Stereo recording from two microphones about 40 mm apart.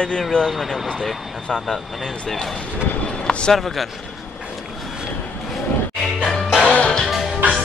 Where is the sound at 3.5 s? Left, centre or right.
Centre.